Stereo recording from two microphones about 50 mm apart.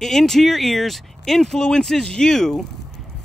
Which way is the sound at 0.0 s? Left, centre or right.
Centre.